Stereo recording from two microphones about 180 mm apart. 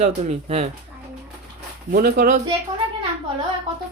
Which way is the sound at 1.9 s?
55° right (ahead or behind).